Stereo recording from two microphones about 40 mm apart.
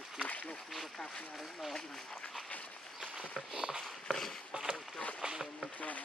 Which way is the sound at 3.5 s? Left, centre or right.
Centre.